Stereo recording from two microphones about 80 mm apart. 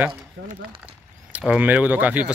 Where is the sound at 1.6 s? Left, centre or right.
Right.